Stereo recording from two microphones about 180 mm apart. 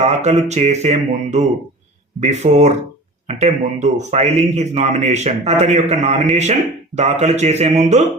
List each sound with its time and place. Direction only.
0.0 s a man's voice: 40° right (ahead or behind)